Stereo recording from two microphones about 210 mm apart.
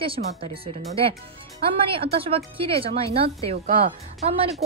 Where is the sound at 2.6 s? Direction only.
25° right (ahead or behind).